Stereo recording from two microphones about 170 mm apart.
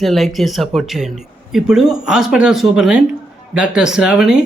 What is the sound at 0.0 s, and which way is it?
Speech, centre (ahead or behind).